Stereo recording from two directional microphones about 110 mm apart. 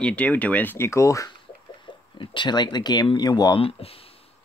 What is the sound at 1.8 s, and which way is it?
Speech, 50° left (ahead or behind).